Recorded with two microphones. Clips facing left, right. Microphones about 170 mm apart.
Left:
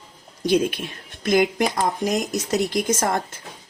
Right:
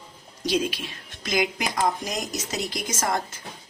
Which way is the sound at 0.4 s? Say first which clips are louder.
Left 5 dB; 55° left (ahead or behind).